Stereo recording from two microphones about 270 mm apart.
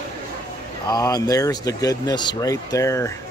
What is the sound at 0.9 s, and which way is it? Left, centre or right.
Speech, centre.